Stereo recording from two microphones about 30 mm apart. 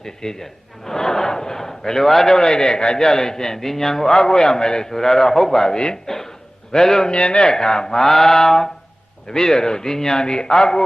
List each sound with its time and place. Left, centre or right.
0.0 s a man's voice: centre
0.9 s a sound: centre
2.3 s a man's voice: left
5.7 s a man's voice: left
7.1 s speech: left
7.5 s a man's voice: left
8.0 s a man's voice: centre